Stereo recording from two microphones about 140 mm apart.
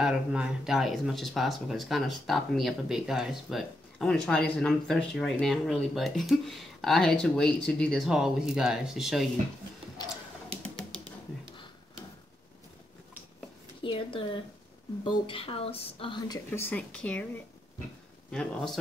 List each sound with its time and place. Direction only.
0.0 s speech: 5° right (ahead or behind)
10.6 s typing: 5° left (ahead or behind)
13.8 s speech: 40° left (ahead or behind)
16.4 s speech: 15° left (ahead or behind)
18.3 s speech: 5° left (ahead or behind)